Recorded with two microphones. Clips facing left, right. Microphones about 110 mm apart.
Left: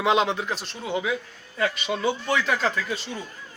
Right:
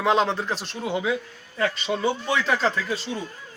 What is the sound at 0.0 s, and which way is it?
Speech, 15° left (ahead or behind).